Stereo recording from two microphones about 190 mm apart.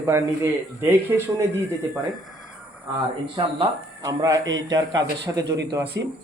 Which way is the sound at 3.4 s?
25° right (ahead or behind).